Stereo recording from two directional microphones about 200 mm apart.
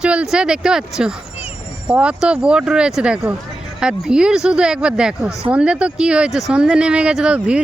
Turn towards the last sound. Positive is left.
turn(degrees=-5)  # may be behind; listen again after turning